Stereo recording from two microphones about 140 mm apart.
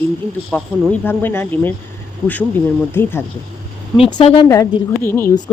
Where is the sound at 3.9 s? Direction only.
45° left (ahead or behind).